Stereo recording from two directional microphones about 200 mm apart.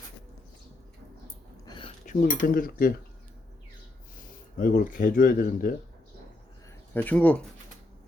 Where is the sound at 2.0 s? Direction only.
40° left (ahead or behind).